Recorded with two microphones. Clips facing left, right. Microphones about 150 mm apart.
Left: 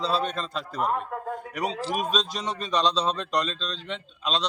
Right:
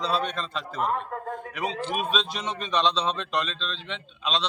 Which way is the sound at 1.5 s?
40° left (ahead or behind).